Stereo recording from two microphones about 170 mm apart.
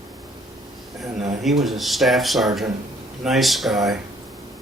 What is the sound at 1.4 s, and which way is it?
Speech, centre (ahead or behind).